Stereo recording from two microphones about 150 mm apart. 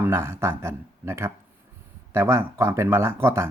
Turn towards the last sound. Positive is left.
turn(degrees=-15)  # may be behind; listen again after turning